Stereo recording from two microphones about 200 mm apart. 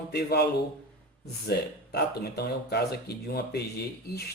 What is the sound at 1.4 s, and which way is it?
Speech, 55° left (ahead or behind).